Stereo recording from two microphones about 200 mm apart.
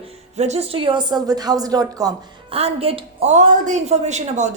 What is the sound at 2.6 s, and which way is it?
A woman's voice, 30° right (ahead or behind).